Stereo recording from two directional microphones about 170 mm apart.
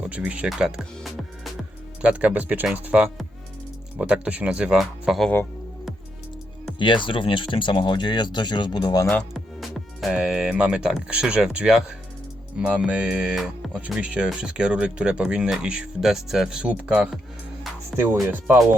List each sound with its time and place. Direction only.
0.0 s speech: 5° right (ahead or behind)
6.7 s speech: 30° left (ahead or behind)
9.3 s speech: centre (ahead or behind)